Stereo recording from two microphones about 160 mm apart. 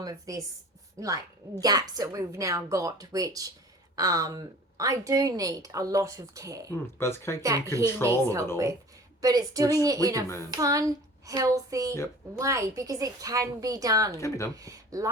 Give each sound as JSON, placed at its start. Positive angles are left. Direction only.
{"t": 0.0, "sound": "a woman's voice", "side_deg": -20}
{"t": 7.0, "sound": "speech", "side_deg": 15}
{"t": 7.4, "sound": "a woman's voice", "side_deg": -20}
{"t": 10.2, "sound": "speech", "side_deg": 15}
{"t": 10.5, "sound": "a woman's voice", "side_deg": -20}
{"t": 14.2, "sound": "speech", "side_deg": 20}
{"t": 14.5, "sound": "speech", "side_deg": -20}